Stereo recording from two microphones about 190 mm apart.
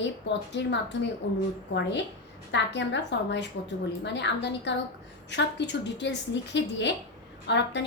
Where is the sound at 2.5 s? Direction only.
70° left (ahead or behind).